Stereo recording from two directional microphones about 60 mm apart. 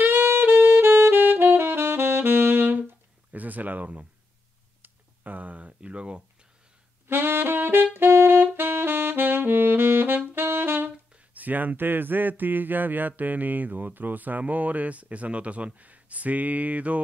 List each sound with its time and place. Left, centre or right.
0.0 s saxophone: right
3.3 s speech: right
7.1 s saxophone: right
11.3 s speech: right